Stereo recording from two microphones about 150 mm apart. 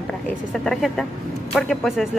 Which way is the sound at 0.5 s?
Centre (ahead or behind).